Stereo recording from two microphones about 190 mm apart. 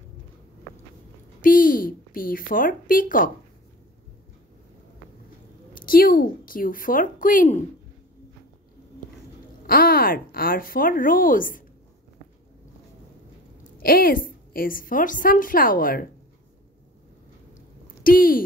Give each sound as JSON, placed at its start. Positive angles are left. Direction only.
{"t": 1.4, "sound": "a woman's voice", "side_deg": 45}
{"t": 5.8, "sound": "a woman's voice", "side_deg": 50}
{"t": 9.7, "sound": "a woman's voice", "side_deg": 50}
{"t": 13.7, "sound": "a woman's voice", "side_deg": 50}
{"t": 18.0, "sound": "a woman's voice", "side_deg": 50}